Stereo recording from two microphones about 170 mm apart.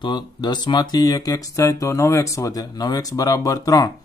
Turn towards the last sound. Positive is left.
turn(degrees=20)  # may be behind; listen again after turning